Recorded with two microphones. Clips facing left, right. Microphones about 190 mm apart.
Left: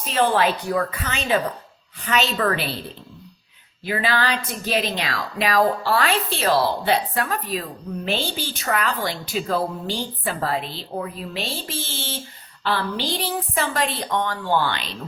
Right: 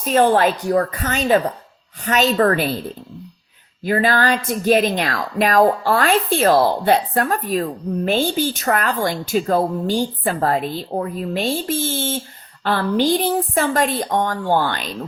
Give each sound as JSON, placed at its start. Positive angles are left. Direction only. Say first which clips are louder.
{"t": 0.0, "sound": "speech", "louder": "right 5 dB", "side_deg": -45}
{"t": 3.8, "sound": "speech", "louder": "right 5 dB", "side_deg": -45}